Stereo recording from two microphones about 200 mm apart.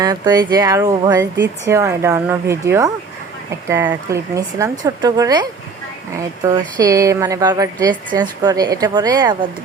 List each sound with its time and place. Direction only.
0.0 s a woman's voice: 20° right (ahead or behind)